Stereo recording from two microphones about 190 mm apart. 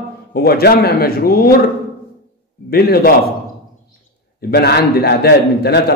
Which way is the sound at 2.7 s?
55° left (ahead or behind).